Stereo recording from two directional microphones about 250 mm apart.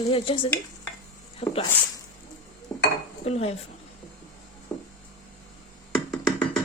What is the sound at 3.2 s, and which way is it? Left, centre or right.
Speech, left.